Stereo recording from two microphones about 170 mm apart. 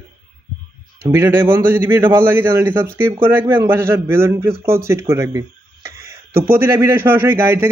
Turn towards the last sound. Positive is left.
turn(degrees=-15)  # may be behind; listen again after turning